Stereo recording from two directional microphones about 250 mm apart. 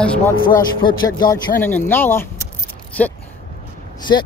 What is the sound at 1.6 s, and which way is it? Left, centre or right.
Speech, centre.